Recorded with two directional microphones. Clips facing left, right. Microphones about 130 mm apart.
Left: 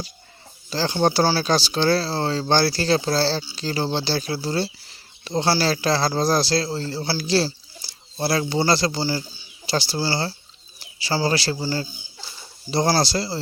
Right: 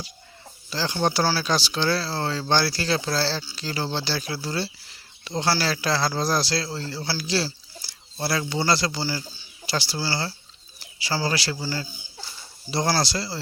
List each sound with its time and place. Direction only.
0.7 s a man's voice: 35° left (ahead or behind)
7.8 s bird: 25° left (ahead or behind)
8.4 s a man's voice: 30° left (ahead or behind)